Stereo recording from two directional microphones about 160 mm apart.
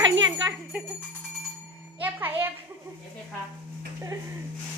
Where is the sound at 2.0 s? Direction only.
15° right (ahead or behind).